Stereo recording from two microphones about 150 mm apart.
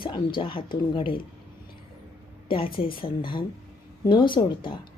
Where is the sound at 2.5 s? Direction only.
35° left (ahead or behind).